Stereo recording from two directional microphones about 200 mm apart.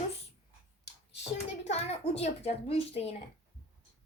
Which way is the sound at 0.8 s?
60° left (ahead or behind).